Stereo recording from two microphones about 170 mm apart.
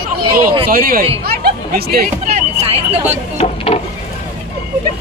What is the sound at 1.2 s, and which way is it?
Chatter, 65° right (ahead or behind).